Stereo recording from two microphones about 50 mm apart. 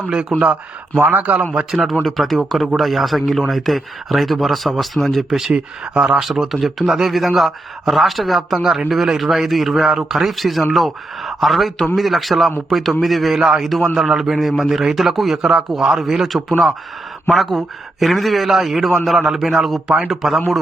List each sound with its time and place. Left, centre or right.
0.1 s a man's voice: centre
2.0 s a man's voice: centre
5.5 s a man's voice: centre